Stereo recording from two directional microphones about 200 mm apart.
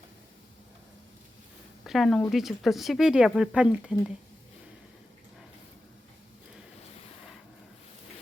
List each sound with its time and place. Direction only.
1.8 s speech: centre (ahead or behind)